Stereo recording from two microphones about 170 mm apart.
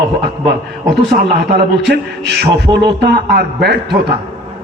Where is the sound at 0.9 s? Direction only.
75° right (ahead or behind).